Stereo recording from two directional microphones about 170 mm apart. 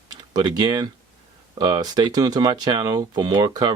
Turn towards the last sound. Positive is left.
turn(degrees=-25)  # may be behind; listen again after turning